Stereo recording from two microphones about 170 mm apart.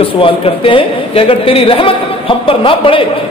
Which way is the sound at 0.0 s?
30° left (ahead or behind).